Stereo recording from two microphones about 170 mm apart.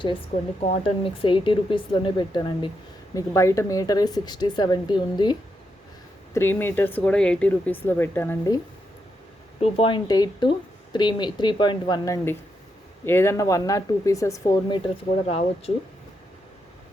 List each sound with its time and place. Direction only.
0.6 s speech: 35° left (ahead or behind)
6.3 s speech: 15° left (ahead or behind)
9.6 s speech: 35° left (ahead or behind)
15.3 s speech: 35° left (ahead or behind)